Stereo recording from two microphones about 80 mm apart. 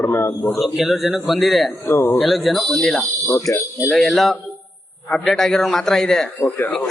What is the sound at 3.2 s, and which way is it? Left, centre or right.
Speech, left.